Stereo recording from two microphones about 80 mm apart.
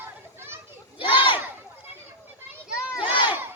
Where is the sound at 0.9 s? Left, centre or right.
Left.